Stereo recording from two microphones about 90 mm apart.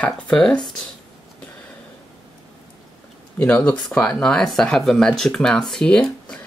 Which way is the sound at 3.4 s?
15° left (ahead or behind).